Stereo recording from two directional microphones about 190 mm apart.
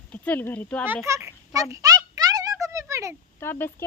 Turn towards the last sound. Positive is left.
turn(degrees=10)  # may be behind; listen again after turning